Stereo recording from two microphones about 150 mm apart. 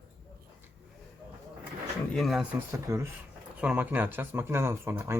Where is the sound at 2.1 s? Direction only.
Centre (ahead or behind).